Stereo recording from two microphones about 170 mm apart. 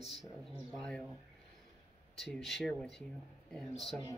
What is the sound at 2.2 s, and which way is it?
Speech, centre (ahead or behind).